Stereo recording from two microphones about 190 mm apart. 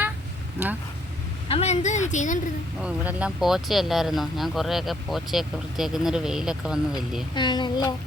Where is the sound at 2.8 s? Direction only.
5° right (ahead or behind).